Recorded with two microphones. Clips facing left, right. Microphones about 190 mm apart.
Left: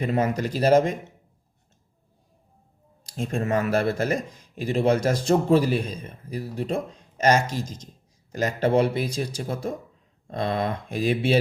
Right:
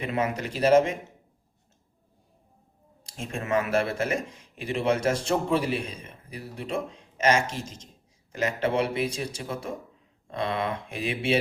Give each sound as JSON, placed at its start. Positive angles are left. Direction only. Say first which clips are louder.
{"t": 0.0, "sound": "speech", "louder": "left 4 dB", "side_deg": 40}
{"t": 3.2, "sound": "speech", "louder": "left 3 dB", "side_deg": 35}